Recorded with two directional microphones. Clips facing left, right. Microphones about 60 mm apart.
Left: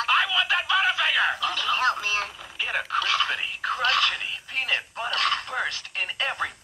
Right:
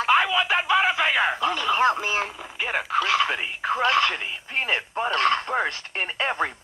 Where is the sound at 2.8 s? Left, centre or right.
Centre.